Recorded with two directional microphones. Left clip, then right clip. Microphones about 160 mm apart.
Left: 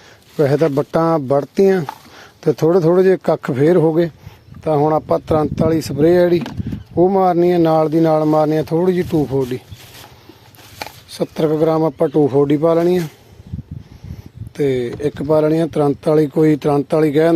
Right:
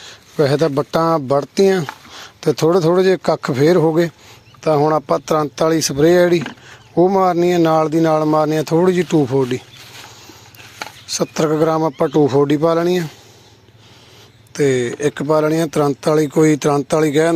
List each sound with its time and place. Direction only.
0.3 s speech: 15° left (ahead or behind)
11.1 s speech: centre (ahead or behind)
14.5 s speech: 5° left (ahead or behind)